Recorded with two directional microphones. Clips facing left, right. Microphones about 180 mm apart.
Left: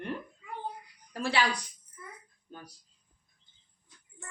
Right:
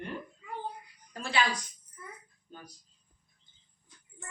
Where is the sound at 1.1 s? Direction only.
65° left (ahead or behind).